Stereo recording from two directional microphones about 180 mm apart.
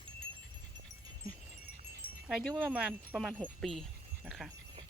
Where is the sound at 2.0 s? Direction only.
30° left (ahead or behind).